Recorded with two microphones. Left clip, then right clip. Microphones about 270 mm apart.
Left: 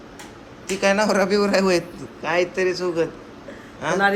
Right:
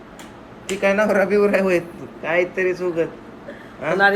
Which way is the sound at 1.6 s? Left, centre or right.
Left.